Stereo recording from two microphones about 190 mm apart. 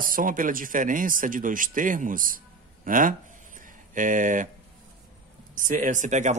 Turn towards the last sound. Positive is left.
turn(degrees=-40)  # may be behind; listen again after turning